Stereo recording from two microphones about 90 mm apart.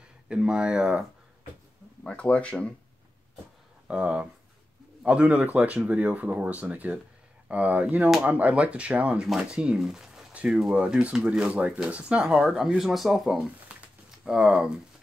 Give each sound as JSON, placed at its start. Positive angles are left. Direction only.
{"t": 0.3, "sound": "speech", "side_deg": -10}
{"t": 2.0, "sound": "speech", "side_deg": 15}
{"t": 3.8, "sound": "speech", "side_deg": -15}
{"t": 10.3, "sound": "a sound", "side_deg": -15}
{"t": 10.7, "sound": "speech", "side_deg": -10}